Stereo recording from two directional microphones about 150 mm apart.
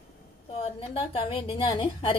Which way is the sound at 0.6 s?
35° left (ahead or behind).